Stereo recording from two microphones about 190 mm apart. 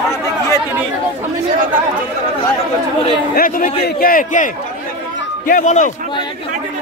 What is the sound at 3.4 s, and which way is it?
A man's voice, 50° left (ahead or behind).